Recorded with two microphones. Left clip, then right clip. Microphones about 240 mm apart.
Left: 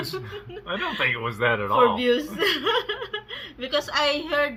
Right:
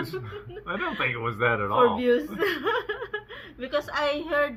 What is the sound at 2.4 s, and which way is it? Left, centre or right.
Speech, left.